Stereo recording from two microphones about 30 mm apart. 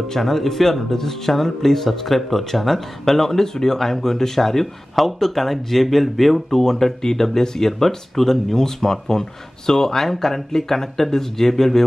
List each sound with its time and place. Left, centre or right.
0.1 s speech: centre